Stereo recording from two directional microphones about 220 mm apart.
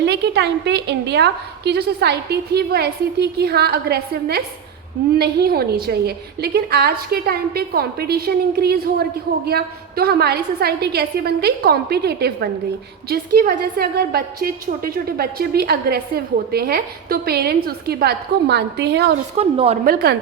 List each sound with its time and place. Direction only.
0.0 s a woman's voice: 50° right (ahead or behind)
19.4 s a woman's voice: 25° right (ahead or behind)
19.8 s a woman's voice: 45° right (ahead or behind)